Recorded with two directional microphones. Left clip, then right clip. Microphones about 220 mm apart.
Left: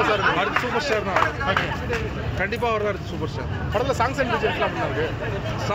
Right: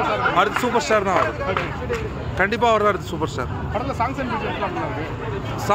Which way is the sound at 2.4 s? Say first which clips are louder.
Right 6 dB; 50° right (ahead or behind).